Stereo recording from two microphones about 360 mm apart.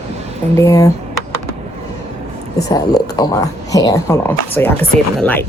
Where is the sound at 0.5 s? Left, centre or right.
Centre.